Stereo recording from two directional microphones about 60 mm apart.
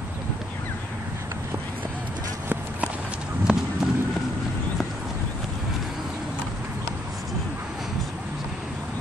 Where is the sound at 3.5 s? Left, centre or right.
Centre.